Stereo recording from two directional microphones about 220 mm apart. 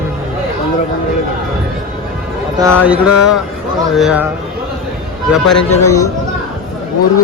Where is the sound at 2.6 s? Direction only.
10° right (ahead or behind).